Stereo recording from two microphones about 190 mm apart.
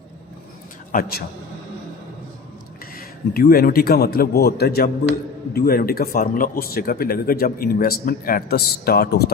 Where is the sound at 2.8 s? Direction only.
50° left (ahead or behind).